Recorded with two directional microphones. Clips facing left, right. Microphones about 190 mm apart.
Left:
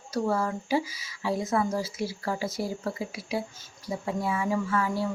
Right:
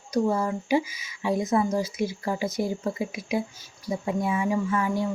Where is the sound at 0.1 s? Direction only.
20° right (ahead or behind).